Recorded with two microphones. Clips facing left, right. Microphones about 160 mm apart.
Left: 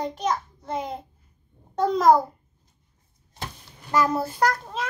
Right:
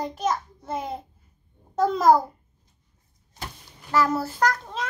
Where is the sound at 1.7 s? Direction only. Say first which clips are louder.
Even; 5° right (ahead or behind).